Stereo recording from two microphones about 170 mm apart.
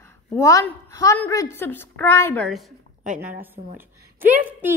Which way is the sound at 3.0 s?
50° right (ahead or behind).